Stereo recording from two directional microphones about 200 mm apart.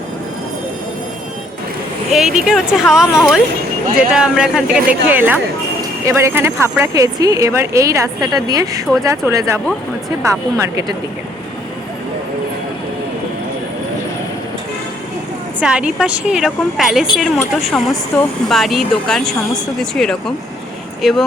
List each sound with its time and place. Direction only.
2.1 s a woman's voice: 5° right (ahead or behind)
15.6 s a woman's voice: 5° right (ahead or behind)